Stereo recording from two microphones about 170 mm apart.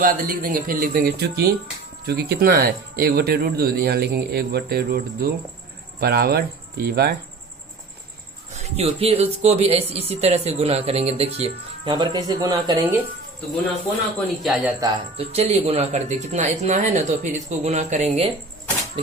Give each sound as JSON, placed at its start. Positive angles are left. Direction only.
{"t": 0.0, "sound": "speech", "side_deg": -55}
{"t": 8.5, "sound": "speech", "side_deg": -40}
{"t": 14.4, "sound": "speech", "side_deg": -5}
{"t": 15.2, "sound": "speech", "side_deg": -40}